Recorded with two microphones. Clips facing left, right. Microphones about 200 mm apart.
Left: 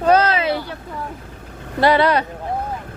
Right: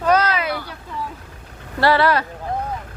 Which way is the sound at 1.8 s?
20° left (ahead or behind).